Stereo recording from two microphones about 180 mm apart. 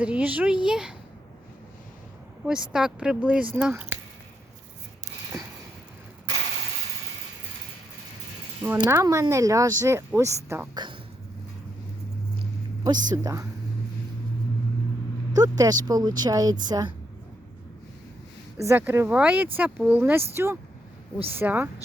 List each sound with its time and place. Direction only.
0.0 s speech: 5° right (ahead or behind)
2.4 s speech: 5° right (ahead or behind)
8.9 s speech: 15° right (ahead or behind)
12.8 s speech: 20° right (ahead or behind)
15.3 s speech: 20° right (ahead or behind)
18.5 s speech: 15° right (ahead or behind)